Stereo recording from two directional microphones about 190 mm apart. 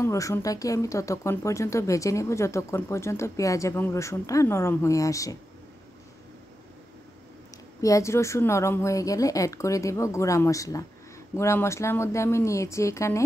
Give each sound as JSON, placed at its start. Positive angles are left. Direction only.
{"t": 0.0, "sound": "speech", "side_deg": 15}
{"t": 7.8, "sound": "speech", "side_deg": 15}